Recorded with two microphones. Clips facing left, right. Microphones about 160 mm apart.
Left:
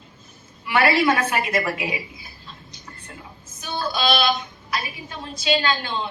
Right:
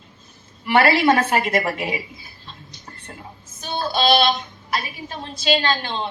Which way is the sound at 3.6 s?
25° right (ahead or behind).